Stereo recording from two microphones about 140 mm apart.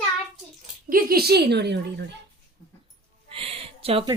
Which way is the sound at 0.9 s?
90° right.